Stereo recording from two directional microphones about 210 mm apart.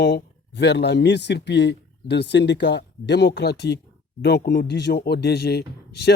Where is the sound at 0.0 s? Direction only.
55° left (ahead or behind).